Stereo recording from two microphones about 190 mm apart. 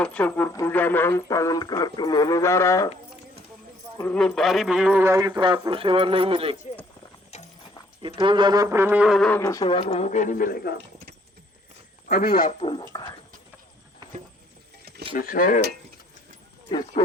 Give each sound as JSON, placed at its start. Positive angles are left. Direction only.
{"t": 0.0, "sound": "speech", "side_deg": 5}
{"t": 4.0, "sound": "a man's voice", "side_deg": 5}
{"t": 7.3, "sound": "clip-clop", "side_deg": 35}
{"t": 8.0, "sound": "speech", "side_deg": -25}
{"t": 9.4, "sound": "speech", "side_deg": 15}
{"t": 9.6, "sound": "speech", "side_deg": 30}
{"t": 12.0, "sound": "speech", "side_deg": 55}
{"t": 12.5, "sound": "speech", "side_deg": 30}
{"t": 15.1, "sound": "speech", "side_deg": 50}